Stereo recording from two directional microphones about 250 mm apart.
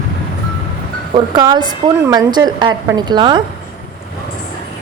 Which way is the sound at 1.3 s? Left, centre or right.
Centre.